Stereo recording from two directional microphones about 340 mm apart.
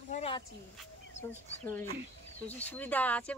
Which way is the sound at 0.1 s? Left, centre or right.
Centre.